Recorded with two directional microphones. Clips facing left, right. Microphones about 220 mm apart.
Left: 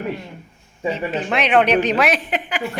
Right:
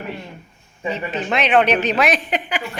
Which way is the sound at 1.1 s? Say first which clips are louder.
Right 1 dB; 10° left (ahead or behind).